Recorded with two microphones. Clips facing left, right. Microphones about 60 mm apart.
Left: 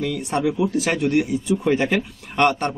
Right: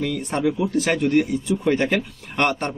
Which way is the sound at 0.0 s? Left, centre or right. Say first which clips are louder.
Even; centre.